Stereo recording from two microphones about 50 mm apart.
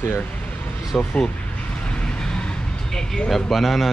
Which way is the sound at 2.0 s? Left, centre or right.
Centre.